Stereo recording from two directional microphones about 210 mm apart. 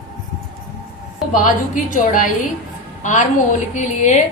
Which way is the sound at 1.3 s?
40° left (ahead or behind).